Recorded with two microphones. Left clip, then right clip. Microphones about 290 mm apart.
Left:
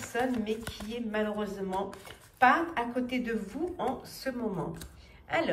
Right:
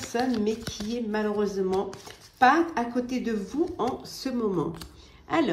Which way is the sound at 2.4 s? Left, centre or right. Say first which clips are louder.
Right 4 dB; centre.